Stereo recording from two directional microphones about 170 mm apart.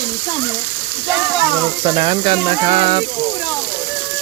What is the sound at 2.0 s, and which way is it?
Speech, 35° right (ahead or behind).